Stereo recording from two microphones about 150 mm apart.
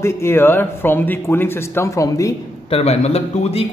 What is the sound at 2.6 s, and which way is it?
Speech, 40° left (ahead or behind).